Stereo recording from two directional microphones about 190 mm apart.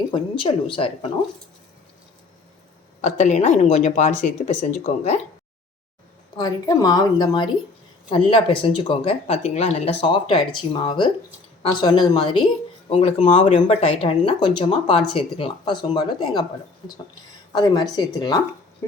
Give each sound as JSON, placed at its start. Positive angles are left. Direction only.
{"t": 0.1, "sound": "speech", "side_deg": 25}
{"t": 3.0, "sound": "speech", "side_deg": 40}
{"t": 6.3, "sound": "speech", "side_deg": 20}